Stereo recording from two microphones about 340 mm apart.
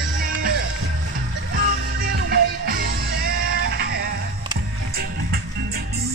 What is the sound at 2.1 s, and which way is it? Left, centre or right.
Music, right.